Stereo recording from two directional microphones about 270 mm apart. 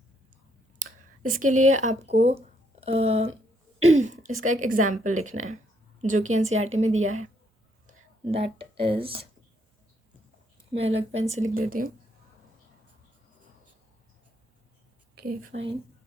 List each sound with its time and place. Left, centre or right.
1.2 s speech: right
10.8 s speech: right
15.3 s speech: right